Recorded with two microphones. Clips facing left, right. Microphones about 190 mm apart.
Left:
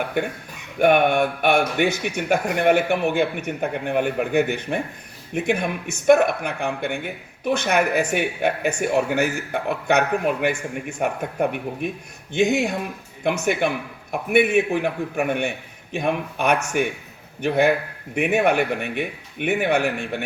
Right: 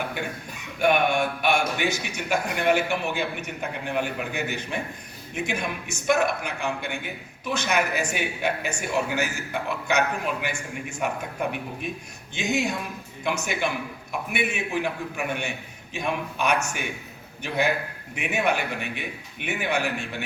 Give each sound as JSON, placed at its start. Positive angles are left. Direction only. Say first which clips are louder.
{"t": 0.2, "sound": "speech", "louder": "left 7 dB", "side_deg": 55}